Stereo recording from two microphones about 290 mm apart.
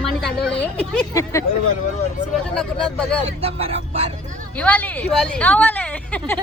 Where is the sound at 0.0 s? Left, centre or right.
Centre.